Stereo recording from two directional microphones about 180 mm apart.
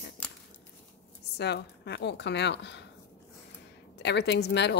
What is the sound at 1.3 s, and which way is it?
A woman's voice, 65° left (ahead or behind).